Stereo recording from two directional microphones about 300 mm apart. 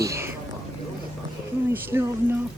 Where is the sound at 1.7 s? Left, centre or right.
Centre.